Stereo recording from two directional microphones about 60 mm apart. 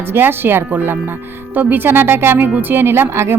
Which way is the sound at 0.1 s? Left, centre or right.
Right.